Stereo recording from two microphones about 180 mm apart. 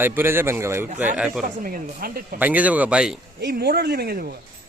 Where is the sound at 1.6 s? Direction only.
50° right (ahead or behind).